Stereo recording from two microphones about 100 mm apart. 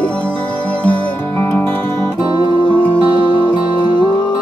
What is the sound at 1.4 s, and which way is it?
Music, 25° left (ahead or behind).